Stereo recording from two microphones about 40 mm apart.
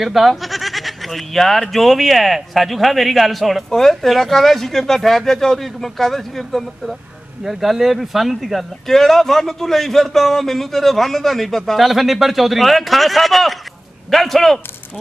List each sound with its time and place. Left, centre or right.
0.0 s speech: centre
7.4 s speech: centre